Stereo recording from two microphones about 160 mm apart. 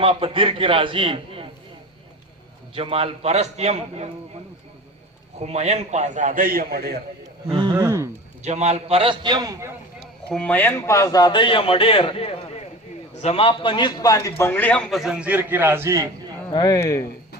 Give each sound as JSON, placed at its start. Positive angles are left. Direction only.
{"t": 0.0, "sound": "a man's voice", "side_deg": -35}
{"t": 2.7, "sound": "a man's voice", "side_deg": -35}
{"t": 5.4, "sound": "a man's voice", "side_deg": -45}
{"t": 7.5, "sound": "speech", "side_deg": -30}
{"t": 8.4, "sound": "a man's voice", "side_deg": -40}
{"t": 10.2, "sound": "a man's voice", "side_deg": 5}
{"t": 16.5, "sound": "a man's voice", "side_deg": 25}